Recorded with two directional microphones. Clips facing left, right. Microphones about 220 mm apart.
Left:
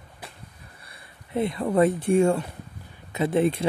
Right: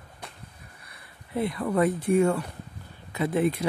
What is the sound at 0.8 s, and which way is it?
Speech, 25° left (ahead or behind).